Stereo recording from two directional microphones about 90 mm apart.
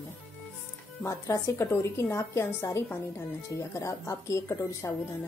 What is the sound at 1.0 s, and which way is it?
A woman's voice, 35° left (ahead or behind).